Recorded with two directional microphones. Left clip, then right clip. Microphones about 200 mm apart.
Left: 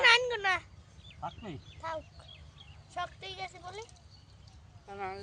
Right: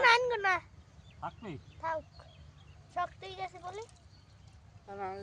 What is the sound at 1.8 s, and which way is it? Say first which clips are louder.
A child's voice: right 3 dB; 55° right (ahead or behind).